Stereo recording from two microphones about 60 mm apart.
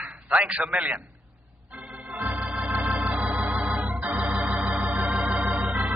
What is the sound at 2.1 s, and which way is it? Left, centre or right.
Organ, right.